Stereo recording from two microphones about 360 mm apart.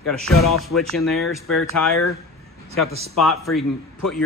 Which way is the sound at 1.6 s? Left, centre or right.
Left.